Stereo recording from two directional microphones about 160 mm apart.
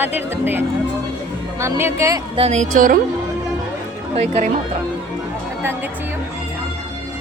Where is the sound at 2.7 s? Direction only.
60° right (ahead or behind).